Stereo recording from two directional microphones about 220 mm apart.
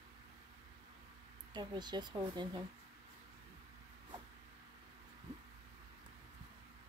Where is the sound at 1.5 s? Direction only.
20° right (ahead or behind).